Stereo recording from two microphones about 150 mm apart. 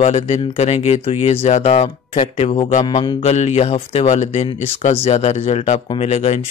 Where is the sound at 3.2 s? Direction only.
45° left (ahead or behind).